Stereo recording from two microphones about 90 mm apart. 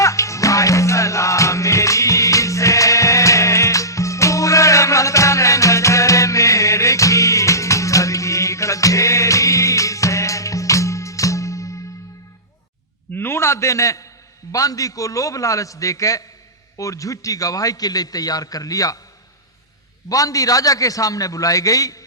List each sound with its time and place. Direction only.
0.0 s music: 35° left (ahead or behind)
13.1 s a sound: 25° left (ahead or behind)
14.5 s a man's voice: 40° left (ahead or behind)
20.1 s a man's voice: 40° left (ahead or behind)